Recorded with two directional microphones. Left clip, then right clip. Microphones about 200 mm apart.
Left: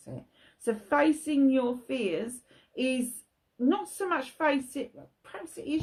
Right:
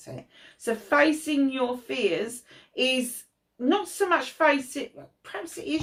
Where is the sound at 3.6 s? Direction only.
45° left (ahead or behind).